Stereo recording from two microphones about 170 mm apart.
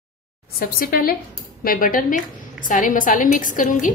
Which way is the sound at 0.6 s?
55° left (ahead or behind).